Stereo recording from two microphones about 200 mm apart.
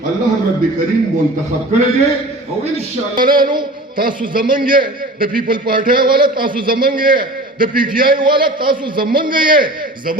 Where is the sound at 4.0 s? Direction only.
45° right (ahead or behind).